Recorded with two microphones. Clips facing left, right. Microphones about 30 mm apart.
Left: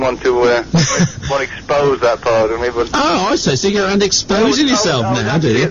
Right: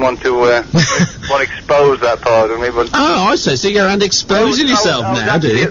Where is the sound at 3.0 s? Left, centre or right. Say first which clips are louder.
Right 2 dB; centre.